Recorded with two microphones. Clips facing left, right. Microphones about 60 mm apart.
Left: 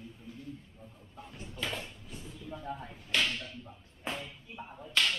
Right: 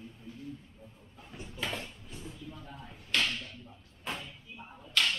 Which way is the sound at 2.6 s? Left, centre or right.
Left.